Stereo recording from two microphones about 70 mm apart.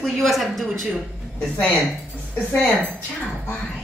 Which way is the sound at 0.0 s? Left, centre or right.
Centre.